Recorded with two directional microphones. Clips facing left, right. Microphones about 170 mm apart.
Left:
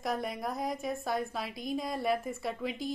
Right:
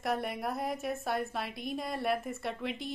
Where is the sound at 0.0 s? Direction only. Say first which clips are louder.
Right 1 dB; centre (ahead or behind).